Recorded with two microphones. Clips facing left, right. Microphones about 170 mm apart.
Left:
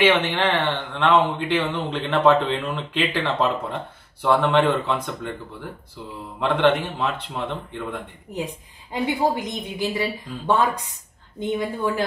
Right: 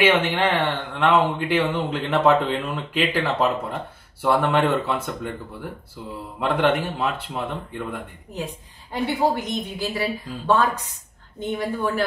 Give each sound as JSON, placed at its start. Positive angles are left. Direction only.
{"t": 0.1, "sound": "speech", "side_deg": -5}
{"t": 6.4, "sound": "speech", "side_deg": -5}
{"t": 8.9, "sound": "speech", "side_deg": 15}